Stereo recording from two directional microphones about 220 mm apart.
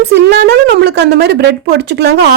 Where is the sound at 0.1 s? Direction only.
50° right (ahead or behind).